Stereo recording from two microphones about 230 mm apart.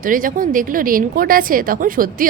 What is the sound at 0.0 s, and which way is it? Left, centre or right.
A woman's voice, right.